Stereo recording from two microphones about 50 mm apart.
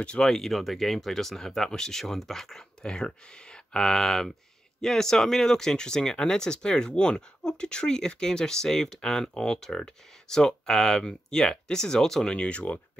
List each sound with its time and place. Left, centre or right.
0.0 s speech: left
0.3 s speech: centre
12.3 s speech: left